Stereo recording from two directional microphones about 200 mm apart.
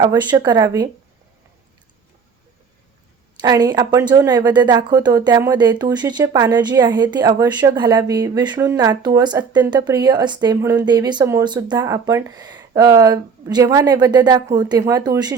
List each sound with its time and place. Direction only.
0.0 s speech: 20° right (ahead or behind)
3.4 s speech: 20° right (ahead or behind)